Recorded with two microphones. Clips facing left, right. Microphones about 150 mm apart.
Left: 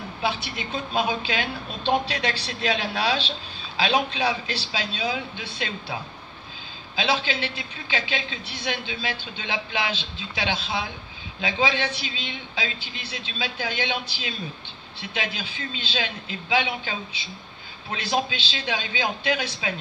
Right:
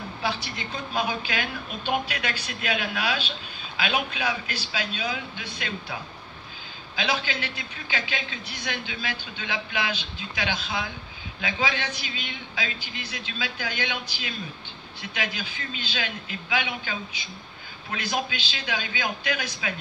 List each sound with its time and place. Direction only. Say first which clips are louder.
0.2 s a woman's voice: left 3 dB; 20° left (ahead or behind)
7.0 s a woman's voice: left 3 dB; 25° left (ahead or behind)